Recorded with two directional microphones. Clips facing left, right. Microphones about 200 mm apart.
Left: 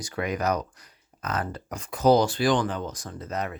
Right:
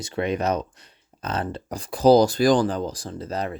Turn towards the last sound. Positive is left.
turn(degrees=-30)  # may be behind; listen again after turning